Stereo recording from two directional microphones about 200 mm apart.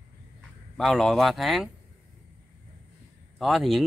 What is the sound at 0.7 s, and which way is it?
Speech, centre (ahead or behind).